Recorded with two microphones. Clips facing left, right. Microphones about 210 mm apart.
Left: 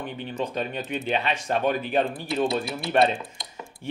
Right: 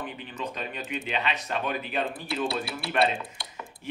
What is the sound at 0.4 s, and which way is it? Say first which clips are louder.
Speech: left 6 dB; 35° left (ahead or behind).